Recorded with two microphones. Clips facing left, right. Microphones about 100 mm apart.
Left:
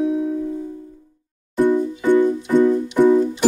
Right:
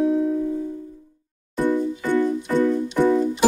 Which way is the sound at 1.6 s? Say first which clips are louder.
Left 5 dB; 15° left (ahead or behind).